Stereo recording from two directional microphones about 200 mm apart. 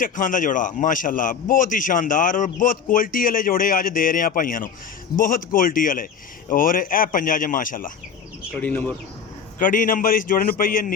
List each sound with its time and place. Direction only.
0.0 s a man's voice: 40° left (ahead or behind)
8.6 s speech: 10° left (ahead or behind)
9.6 s a man's voice: 40° left (ahead or behind)